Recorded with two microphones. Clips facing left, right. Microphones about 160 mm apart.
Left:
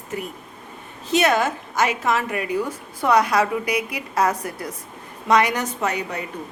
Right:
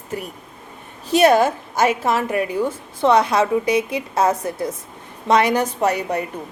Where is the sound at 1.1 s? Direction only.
35° right (ahead or behind).